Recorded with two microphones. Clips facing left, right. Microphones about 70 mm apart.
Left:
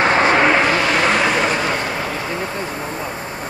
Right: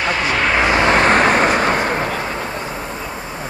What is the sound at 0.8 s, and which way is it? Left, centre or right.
Vehicle, right.